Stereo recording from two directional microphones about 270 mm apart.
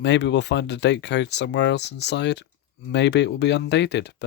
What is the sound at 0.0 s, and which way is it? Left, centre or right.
Speech, left.